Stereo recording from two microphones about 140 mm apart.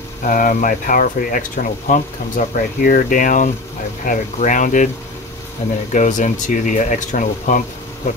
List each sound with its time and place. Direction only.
0.2 s speech: 70° left (ahead or behind)
5.6 s speech: 50° left (ahead or behind)
5.9 s speech: 65° left (ahead or behind)